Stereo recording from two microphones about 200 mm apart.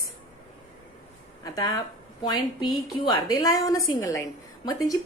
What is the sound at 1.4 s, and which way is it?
A woman's voice, 20° left (ahead or behind).